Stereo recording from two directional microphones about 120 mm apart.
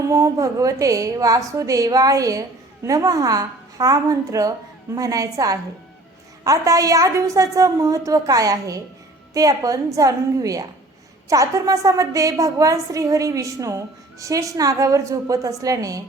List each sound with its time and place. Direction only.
0.0 s a woman's voice: 25° right (ahead or behind)